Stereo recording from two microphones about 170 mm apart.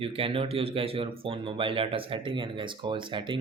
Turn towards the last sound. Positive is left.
turn(degrees=-30)  # may be behind; listen again after turning